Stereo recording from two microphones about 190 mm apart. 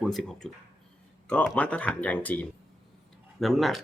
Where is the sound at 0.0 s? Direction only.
Centre (ahead or behind).